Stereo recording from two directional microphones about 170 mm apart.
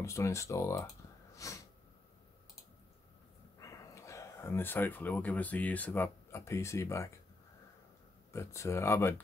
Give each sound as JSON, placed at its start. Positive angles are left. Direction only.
{"t": 0.0, "sound": "speech", "side_deg": 15}
{"t": 1.3, "sound": "a sound", "side_deg": 20}
{"t": 3.5, "sound": "speech", "side_deg": 20}
{"t": 8.3, "sound": "speech", "side_deg": 15}